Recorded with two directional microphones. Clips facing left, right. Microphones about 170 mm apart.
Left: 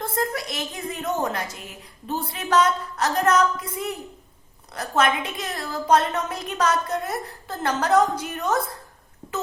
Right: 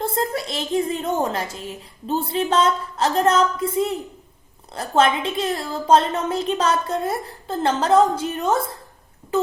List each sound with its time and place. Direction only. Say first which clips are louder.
0.0 s a woman's voice: right 3 dB; 30° right (ahead or behind)